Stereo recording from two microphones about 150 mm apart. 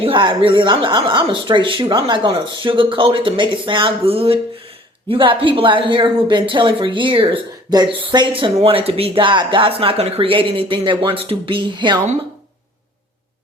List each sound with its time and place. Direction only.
0.0 s speech: 35° right (ahead or behind)